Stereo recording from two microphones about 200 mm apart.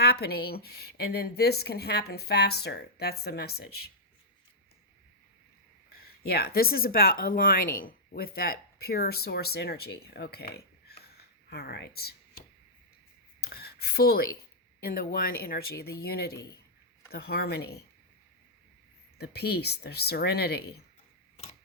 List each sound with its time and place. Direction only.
0.0 s speech: 55° left (ahead or behind)
6.2 s speech: 50° left (ahead or behind)
13.4 s a sound: 50° left (ahead or behind)
14.8 s speech: 50° left (ahead or behind)
19.2 s speech: 55° left (ahead or behind)